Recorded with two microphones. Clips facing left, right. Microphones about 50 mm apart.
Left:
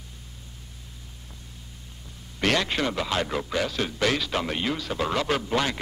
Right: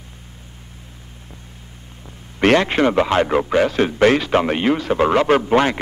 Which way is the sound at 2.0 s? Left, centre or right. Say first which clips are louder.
Right 10 dB; right.